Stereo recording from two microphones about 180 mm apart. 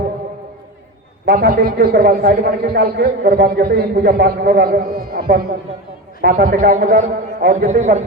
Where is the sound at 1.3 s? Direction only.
60° right (ahead or behind).